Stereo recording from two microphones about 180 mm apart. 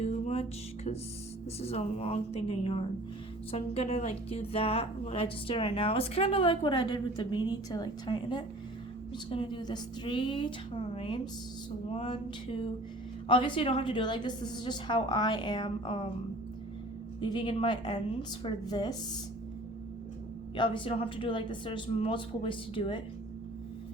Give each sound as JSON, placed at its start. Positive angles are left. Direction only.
{"t": 0.0, "sound": "music", "side_deg": 35}
{"t": 1.6, "sound": "a woman's voice", "side_deg": 35}
{"t": 17.2, "sound": "a woman's voice", "side_deg": 25}
{"t": 20.6, "sound": "a woman's voice", "side_deg": 25}